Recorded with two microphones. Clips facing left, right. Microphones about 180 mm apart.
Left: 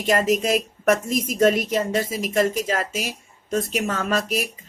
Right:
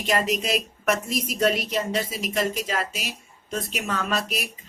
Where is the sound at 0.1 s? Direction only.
45° left (ahead or behind).